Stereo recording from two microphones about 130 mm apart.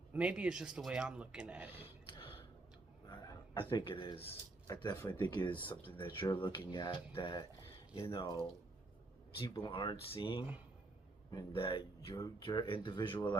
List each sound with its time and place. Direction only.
0.1 s speech: 10° right (ahead or behind)
1.7 s a sound: 45° left (ahead or behind)
3.1 s speech: 35° left (ahead or behind)
4.6 s speech: 30° left (ahead or behind)
4.9 s speech: 15° left (ahead or behind)
5.2 s speech: 35° left (ahead or behind)
9.6 s speech: 35° left (ahead or behind)
11.3 s a man's voice: 30° left (ahead or behind)
11.6 s speech: 40° left (ahead or behind)